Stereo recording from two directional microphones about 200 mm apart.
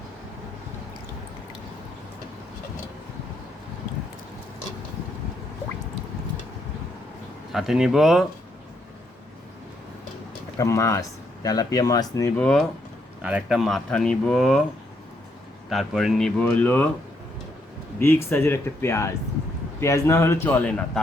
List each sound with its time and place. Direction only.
7.5 s speech: centre (ahead or behind)
10.6 s a man's voice: 15° left (ahead or behind)
12.4 s speech: 5° left (ahead or behind)
15.7 s speech: centre (ahead or behind)
18.0 s a man's voice: 10° left (ahead or behind)